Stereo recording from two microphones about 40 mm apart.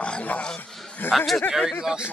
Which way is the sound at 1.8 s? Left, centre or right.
Right.